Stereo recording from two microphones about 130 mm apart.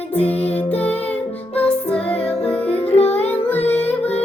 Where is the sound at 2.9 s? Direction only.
55° left (ahead or behind).